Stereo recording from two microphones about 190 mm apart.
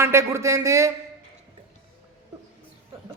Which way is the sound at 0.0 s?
15° right (ahead or behind).